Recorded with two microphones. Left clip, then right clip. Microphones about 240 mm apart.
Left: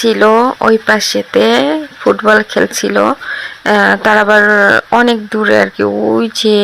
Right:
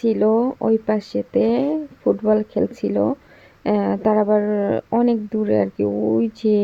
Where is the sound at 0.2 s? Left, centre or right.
Left.